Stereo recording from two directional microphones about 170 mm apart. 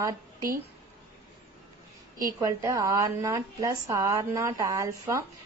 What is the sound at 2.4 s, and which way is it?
A woman's voice, 20° right (ahead or behind).